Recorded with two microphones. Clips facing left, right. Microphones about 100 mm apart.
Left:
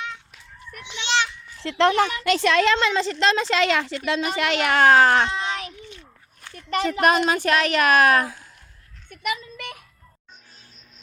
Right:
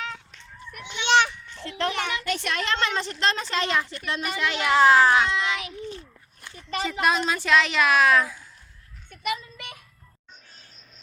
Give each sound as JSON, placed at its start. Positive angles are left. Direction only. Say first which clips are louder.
{"t": 0.9, "sound": "children playing", "louder": "right 4 dB", "side_deg": -50}
{"t": 1.6, "sound": "a woman's voice", "louder": "left 9 dB", "side_deg": 90}
{"t": 4.4, "sound": "speech", "louder": "right 1 dB", "side_deg": 70}
{"t": 5.2, "sound": "child singing", "louder": "even", "side_deg": 35}
{"t": 5.8, "sound": "a sound", "louder": "right 7 dB", "side_deg": -35}
{"t": 6.6, "sound": "speech", "louder": "left 5 dB", "side_deg": 65}
{"t": 9.0, "sound": "a sound", "louder": "left 1 dB", "side_deg": 60}